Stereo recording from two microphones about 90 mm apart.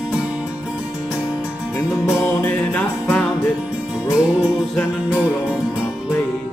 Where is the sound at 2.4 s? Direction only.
20° left (ahead or behind).